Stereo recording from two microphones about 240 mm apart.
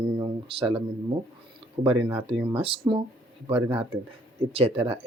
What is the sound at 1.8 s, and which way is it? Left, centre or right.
Speech, right.